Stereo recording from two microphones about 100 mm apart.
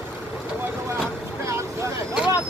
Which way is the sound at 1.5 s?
30° right (ahead or behind).